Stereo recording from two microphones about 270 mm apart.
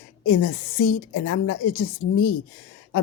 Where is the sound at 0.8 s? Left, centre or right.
Left.